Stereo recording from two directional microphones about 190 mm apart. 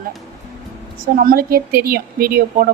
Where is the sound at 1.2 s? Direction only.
50° right (ahead or behind).